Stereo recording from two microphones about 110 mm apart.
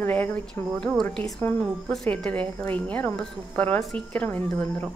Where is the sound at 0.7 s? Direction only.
5° left (ahead or behind).